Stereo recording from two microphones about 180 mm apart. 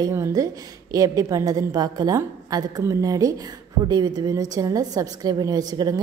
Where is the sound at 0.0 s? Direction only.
15° right (ahead or behind).